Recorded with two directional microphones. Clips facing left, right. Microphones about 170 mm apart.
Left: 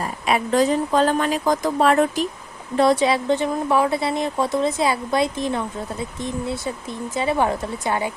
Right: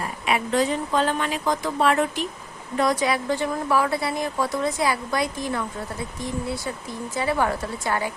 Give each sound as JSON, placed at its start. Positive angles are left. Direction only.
{"t": 0.3, "sound": "speech", "side_deg": 40}
{"t": 2.7, "sound": "speech", "side_deg": 30}